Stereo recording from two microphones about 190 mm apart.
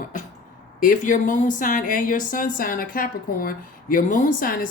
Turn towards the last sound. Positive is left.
turn(degrees=50)  # may be behind; listen again after turning